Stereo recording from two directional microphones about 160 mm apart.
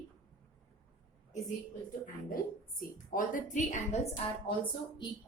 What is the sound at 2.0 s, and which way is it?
A woman's voice, 60° left (ahead or behind).